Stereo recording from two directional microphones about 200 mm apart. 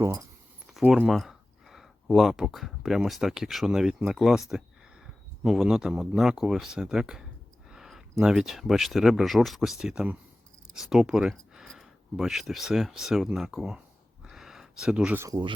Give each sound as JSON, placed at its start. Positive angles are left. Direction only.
{"t": 0.0, "sound": "speech", "side_deg": -15}
{"t": 0.7, "sound": "speech", "side_deg": -5}